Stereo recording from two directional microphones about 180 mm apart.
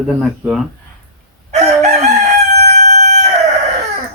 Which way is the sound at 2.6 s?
40° right (ahead or behind).